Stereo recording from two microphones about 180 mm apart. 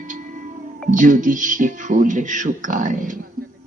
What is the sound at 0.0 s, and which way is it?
Music, 45° right (ahead or behind).